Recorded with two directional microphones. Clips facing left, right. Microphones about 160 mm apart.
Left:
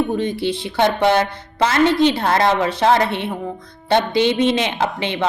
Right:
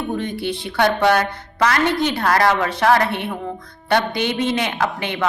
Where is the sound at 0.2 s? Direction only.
25° left (ahead or behind).